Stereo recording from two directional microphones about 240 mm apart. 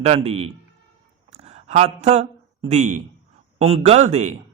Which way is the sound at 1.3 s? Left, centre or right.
Right.